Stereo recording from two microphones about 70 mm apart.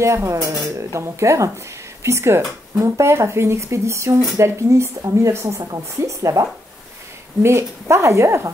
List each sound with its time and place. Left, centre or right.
0.0 s speech: right